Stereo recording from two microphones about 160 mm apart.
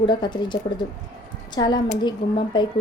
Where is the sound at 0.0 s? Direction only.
30° left (ahead or behind).